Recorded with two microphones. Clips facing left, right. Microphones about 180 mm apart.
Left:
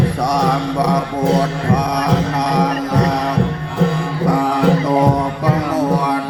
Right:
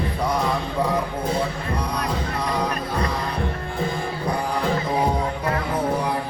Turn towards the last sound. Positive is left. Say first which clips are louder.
# left 7 dB
turn(degrees=85)